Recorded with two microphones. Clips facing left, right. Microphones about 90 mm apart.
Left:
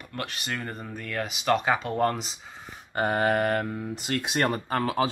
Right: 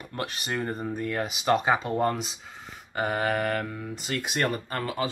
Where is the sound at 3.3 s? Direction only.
40° left (ahead or behind).